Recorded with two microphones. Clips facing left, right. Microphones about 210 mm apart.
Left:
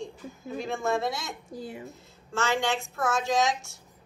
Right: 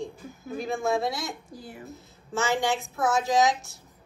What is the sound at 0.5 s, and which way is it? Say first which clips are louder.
A woman's voice: right 2 dB; centre (ahead or behind).